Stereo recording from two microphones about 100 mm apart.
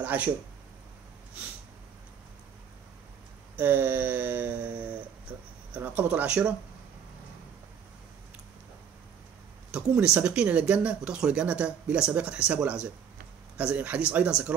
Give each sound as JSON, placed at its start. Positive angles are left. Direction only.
{"t": 0.0, "sound": "speech", "side_deg": -15}
{"t": 3.5, "sound": "speech", "side_deg": -15}
{"t": 9.7, "sound": "speech", "side_deg": -10}